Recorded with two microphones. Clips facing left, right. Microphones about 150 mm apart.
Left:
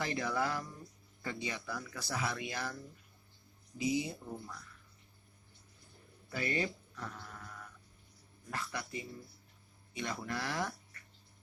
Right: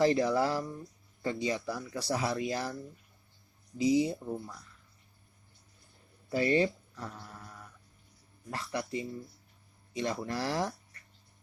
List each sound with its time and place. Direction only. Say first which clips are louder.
0.0 s speech: right 9 dB; 30° right (ahead or behind)
3.8 s speech: right 8 dB; 35° right (ahead or behind)
6.3 s speech: right 9 dB; 30° right (ahead or behind)
8.4 s speech: right 5 dB; 30° right (ahead or behind)